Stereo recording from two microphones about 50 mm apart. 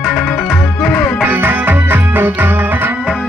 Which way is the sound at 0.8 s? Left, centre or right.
Left.